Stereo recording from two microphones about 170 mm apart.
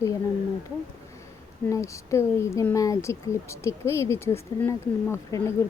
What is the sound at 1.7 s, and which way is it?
Speech, 15° left (ahead or behind).